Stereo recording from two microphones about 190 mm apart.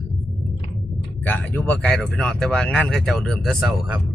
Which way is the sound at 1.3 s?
10° left (ahead or behind).